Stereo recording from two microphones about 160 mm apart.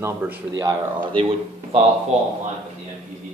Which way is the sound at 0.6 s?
30° right (ahead or behind).